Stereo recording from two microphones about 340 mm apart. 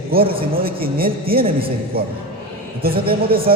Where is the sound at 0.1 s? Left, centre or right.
Right.